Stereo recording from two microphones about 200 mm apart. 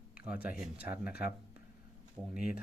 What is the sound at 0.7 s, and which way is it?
Speech, 50° left (ahead or behind).